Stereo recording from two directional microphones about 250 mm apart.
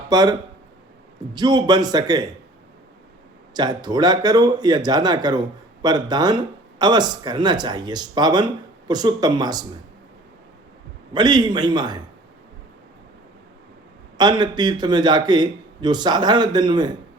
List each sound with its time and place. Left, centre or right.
0.1 s a man's voice: centre
3.5 s a man's voice: centre
11.1 s a man's voice: centre
14.2 s a man's voice: centre